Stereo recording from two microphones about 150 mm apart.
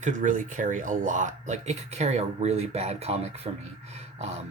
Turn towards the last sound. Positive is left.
turn(degrees=-45)  # may be behind; listen again after turning